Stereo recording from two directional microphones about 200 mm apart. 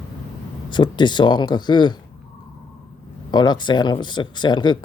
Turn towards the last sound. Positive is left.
turn(degrees=20)  # may be behind; listen again after turning